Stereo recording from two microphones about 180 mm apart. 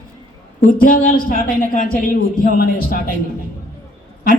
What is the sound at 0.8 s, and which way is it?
A man's voice, 50° left (ahead or behind).